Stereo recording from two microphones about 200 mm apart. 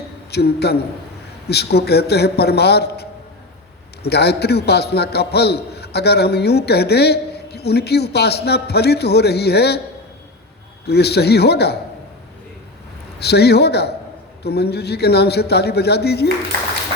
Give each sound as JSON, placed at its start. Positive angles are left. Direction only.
{"t": 0.3, "sound": "a man's voice", "side_deg": 55}
{"t": 10.8, "sound": "a man's voice", "side_deg": 55}
{"t": 13.1, "sound": "a man's voice", "side_deg": 55}